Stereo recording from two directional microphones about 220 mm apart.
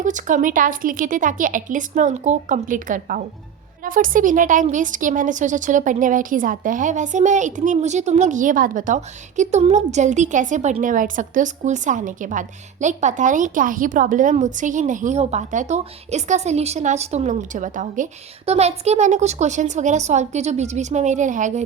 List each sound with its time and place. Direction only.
0.0 s a woman's voice: 35° right (ahead or behind)